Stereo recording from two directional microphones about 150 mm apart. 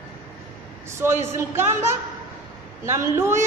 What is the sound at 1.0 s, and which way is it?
A man's voice, 15° right (ahead or behind).